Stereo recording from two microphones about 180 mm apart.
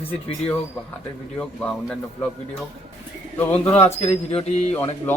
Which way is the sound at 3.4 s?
10° left (ahead or behind).